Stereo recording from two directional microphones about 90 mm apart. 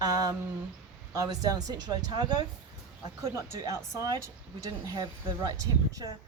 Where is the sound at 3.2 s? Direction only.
40° right (ahead or behind).